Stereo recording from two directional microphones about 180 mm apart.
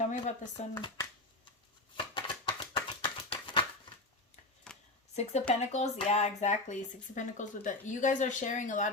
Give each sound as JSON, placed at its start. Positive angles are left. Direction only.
{"t": 0.0, "sound": "speech", "side_deg": 40}
{"t": 0.7, "sound": "speech", "side_deg": 20}
{"t": 2.0, "sound": "a sound", "side_deg": 25}
{"t": 4.7, "sound": "shuffling cards", "side_deg": 5}
{"t": 5.1, "sound": "speech", "side_deg": 40}